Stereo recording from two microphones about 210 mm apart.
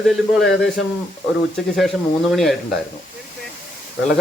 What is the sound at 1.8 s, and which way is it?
Speech, centre (ahead or behind).